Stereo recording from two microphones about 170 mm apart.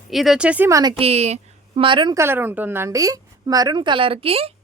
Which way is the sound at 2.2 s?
10° right (ahead or behind).